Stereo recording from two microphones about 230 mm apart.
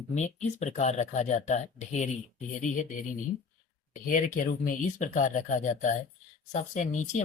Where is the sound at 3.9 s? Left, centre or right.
Left.